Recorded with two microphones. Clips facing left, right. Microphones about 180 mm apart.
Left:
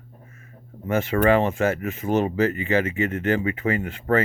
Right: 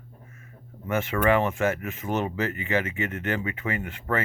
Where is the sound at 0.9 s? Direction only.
35° left (ahead or behind).